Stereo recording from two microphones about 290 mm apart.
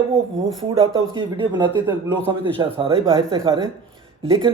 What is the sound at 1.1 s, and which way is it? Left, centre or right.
Speech, centre.